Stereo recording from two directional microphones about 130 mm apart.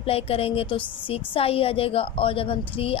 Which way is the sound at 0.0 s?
50° left (ahead or behind).